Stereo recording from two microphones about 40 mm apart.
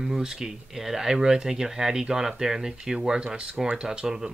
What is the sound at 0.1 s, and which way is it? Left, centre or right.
Speech, centre.